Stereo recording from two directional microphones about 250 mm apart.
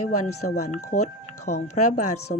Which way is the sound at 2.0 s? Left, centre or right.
Left.